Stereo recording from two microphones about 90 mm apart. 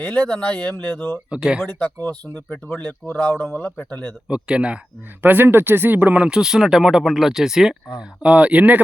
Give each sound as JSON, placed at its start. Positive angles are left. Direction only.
{"t": 0.0, "sound": "speech", "side_deg": 15}
{"t": 1.3, "sound": "speech", "side_deg": -10}
{"t": 2.3, "sound": "speech", "side_deg": 20}
{"t": 4.3, "sound": "speech", "side_deg": -10}